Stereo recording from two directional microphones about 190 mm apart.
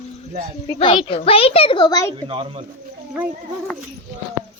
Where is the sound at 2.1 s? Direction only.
30° right (ahead or behind).